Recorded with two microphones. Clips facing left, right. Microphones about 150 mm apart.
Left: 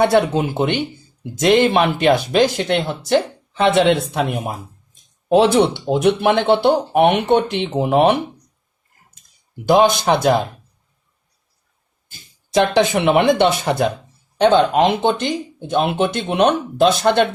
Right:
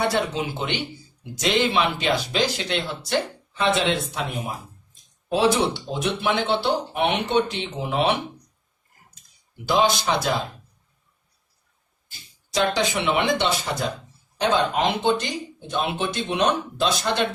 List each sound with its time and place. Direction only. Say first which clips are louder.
0.0 s speech: left 9 dB; 55° left (ahead or behind)
5.7 s speech: left 10 dB; 60° left (ahead or behind)
9.6 s speech: left 7 dB; 50° left (ahead or behind)
12.1 s speech: left 9 dB; 55° left (ahead or behind)